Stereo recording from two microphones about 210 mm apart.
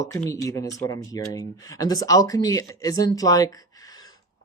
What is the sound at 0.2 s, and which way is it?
Speech, 15° left (ahead or behind).